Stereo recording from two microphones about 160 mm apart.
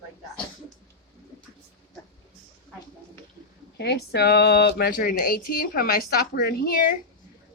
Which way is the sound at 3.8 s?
90° left.